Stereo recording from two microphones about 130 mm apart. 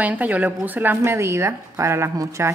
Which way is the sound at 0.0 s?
10° right (ahead or behind).